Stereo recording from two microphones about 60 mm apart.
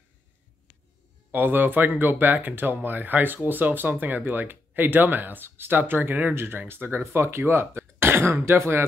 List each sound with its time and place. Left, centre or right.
1.3 s speech: right